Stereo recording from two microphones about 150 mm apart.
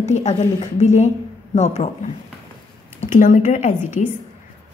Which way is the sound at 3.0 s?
60° left (ahead or behind).